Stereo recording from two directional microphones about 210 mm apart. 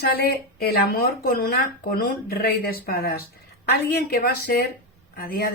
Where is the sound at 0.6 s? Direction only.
45° left (ahead or behind).